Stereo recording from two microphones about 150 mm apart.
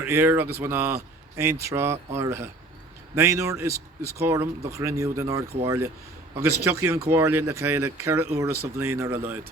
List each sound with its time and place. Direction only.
0.0 s speech: 15° right (ahead or behind)